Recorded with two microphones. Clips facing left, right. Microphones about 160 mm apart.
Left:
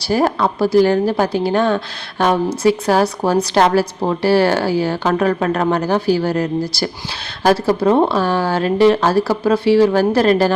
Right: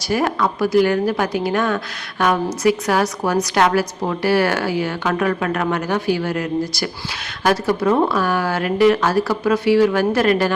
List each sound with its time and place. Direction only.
0.0 s a woman's voice: 35° left (ahead or behind)